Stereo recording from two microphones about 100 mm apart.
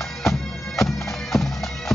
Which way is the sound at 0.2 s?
Centre (ahead or behind).